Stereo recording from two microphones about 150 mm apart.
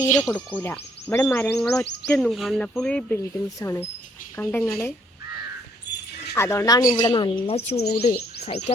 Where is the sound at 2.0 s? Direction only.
5° left (ahead or behind).